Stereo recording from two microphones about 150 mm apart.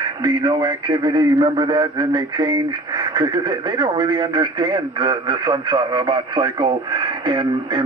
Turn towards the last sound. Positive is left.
turn(degrees=-30)  # may be behind; listen again after turning